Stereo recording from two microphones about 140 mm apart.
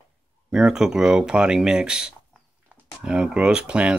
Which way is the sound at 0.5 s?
5° right (ahead or behind).